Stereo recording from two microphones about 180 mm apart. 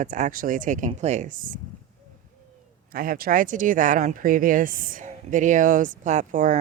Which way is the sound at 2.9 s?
55° right (ahead or behind).